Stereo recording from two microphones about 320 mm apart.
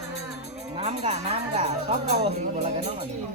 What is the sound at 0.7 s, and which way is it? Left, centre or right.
Speech, centre.